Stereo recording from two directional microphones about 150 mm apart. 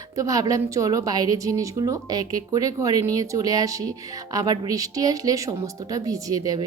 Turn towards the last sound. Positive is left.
turn(degrees=-25)  # may be behind; listen again after turning